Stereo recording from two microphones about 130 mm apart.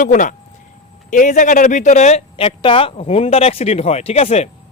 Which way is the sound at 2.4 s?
45° left (ahead or behind).